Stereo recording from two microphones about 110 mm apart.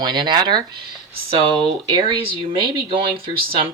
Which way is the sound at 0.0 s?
45° right (ahead or behind).